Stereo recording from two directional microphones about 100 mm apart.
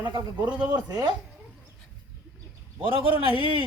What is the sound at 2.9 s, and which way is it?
Speech, 60° right (ahead or behind).